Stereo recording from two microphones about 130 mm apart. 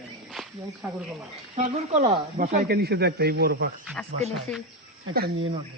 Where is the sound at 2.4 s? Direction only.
90° right.